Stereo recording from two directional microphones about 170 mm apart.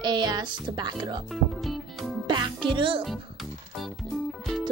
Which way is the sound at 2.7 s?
30° right (ahead or behind).